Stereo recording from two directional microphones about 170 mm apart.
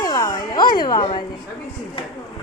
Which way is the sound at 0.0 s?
20° left (ahead or behind).